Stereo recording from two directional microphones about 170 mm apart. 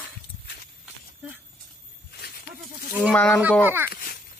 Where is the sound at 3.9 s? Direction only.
60° left (ahead or behind).